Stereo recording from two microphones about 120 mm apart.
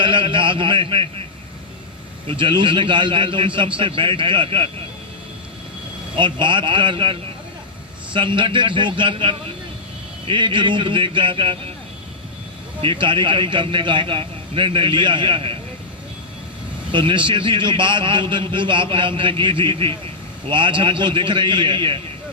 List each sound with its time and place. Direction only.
0.0 s a sound: 45° right (ahead or behind)
2.2 s a man's voice: 45° right (ahead or behind)
6.1 s a man's voice: 40° right (ahead or behind)
12.8 s a man's voice: 45° right (ahead or behind)
16.9 s a man's voice: 40° right (ahead or behind)